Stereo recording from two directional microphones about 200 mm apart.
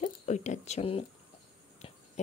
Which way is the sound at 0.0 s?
35° left (ahead or behind).